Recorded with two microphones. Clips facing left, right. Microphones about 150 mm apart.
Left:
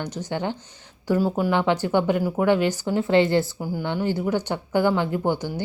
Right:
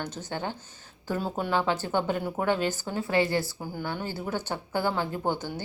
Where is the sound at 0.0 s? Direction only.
15° left (ahead or behind).